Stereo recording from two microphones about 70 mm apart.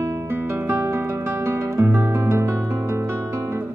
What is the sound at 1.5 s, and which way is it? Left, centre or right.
Guitar, right.